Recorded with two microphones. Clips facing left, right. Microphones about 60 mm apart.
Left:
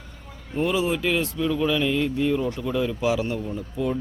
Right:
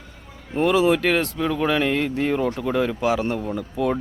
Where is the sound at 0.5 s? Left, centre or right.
Right.